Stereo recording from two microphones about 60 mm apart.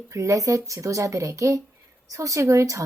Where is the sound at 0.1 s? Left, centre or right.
Right.